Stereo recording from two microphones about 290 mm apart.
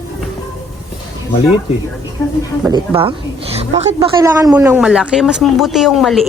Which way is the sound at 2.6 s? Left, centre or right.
Centre.